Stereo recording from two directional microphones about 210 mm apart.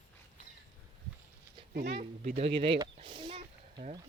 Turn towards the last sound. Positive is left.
turn(degrees=-25)  # may be behind; listen again after turning